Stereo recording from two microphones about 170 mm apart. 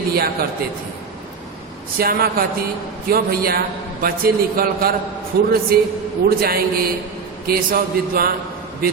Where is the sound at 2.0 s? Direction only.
65° right (ahead or behind).